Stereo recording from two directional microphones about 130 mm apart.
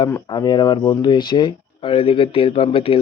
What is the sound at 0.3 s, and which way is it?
Speech, 30° left (ahead or behind).